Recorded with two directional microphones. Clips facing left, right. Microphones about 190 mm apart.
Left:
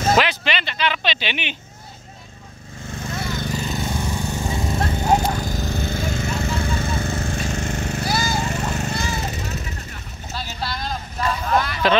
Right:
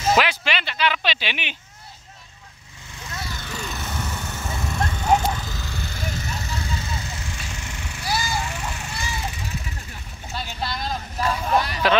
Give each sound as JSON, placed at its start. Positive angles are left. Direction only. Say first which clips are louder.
{"t": 0.1, "sound": "a sound", "louder": "left 1 dB", "side_deg": -5}
{"t": 2.9, "sound": "lawn mower", "louder": "left 7 dB", "side_deg": 50}
{"t": 3.8, "sound": "a sound", "louder": "left 6 dB", "side_deg": 15}
{"t": 4.7, "sound": "horse", "louder": "left 3 dB", "side_deg": 35}
{"t": 5.1, "sound": "a sound", "louder": "even", "side_deg": 40}
{"t": 8.5, "sound": "horse", "louder": "left 7 dB", "side_deg": 40}
{"t": 9.1, "sound": "vehicle", "louder": "left 4 dB", "side_deg": 40}
{"t": 10.3, "sound": "vehicle", "louder": "even", "side_deg": 0}
{"t": 11.8, "sound": "speech", "louder": "left 2 dB", "side_deg": -10}